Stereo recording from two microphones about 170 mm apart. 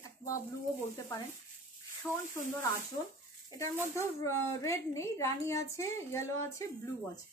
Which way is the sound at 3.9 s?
15° left (ahead or behind).